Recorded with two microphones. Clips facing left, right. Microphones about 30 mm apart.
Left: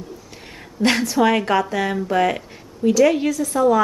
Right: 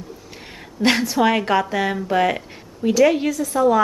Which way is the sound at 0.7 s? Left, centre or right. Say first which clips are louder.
Even; centre.